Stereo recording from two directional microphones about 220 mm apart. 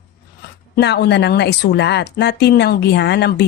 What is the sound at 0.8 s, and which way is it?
Speech, 50° left (ahead or behind).